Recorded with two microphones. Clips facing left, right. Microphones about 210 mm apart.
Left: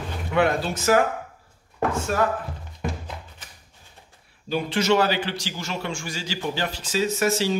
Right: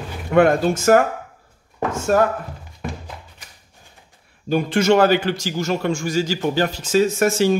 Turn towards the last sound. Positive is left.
turn(degrees=-50)  # may be behind; listen again after turning